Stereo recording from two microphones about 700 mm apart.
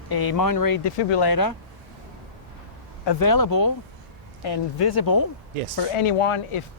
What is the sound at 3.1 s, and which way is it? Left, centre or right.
Speech, left.